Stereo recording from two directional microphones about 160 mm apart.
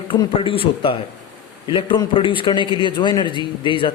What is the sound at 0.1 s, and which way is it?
A man's voice, 35° left (ahead or behind).